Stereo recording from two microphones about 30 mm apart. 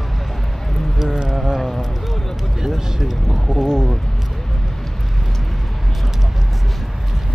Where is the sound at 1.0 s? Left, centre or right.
Centre.